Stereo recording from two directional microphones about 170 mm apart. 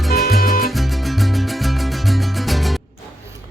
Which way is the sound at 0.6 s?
Centre (ahead or behind).